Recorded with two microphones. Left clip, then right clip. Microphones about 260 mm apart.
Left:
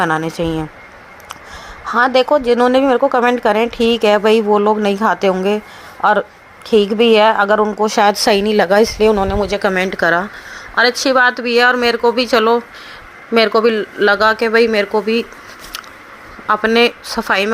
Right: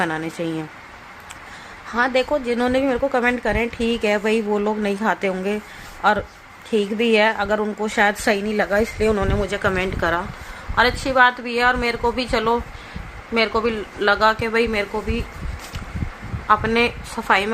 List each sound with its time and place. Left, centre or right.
0.0 s speech: centre
1.9 s a woman's voice: centre
16.5 s a woman's voice: left